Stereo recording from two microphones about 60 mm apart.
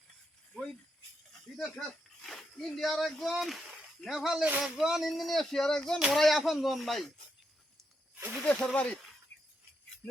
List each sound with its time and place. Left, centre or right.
1.3 s snake: centre
2.7 s speech: centre
8.1 s snake: right
8.4 s speech: centre